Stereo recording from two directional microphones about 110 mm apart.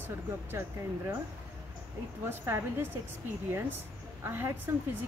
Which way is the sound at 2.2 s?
20° right (ahead or behind).